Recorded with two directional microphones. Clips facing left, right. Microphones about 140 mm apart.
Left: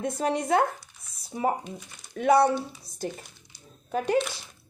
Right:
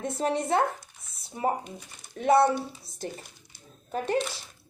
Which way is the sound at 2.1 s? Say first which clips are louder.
Left 1 dB; 30° right (ahead or behind).